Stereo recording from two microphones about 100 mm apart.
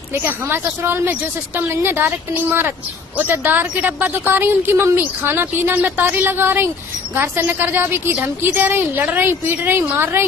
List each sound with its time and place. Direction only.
0.1 s a woman's voice: 25° right (ahead or behind)